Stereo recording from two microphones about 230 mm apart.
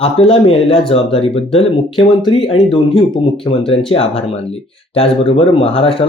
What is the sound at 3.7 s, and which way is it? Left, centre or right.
Speech, left.